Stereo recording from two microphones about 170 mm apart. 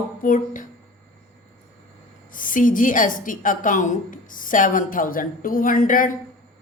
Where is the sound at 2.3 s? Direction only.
50° left (ahead or behind).